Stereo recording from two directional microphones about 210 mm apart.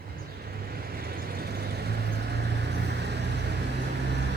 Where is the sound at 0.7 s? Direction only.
45° right (ahead or behind).